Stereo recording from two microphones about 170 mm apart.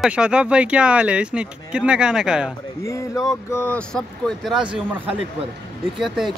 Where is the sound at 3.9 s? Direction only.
Centre (ahead or behind).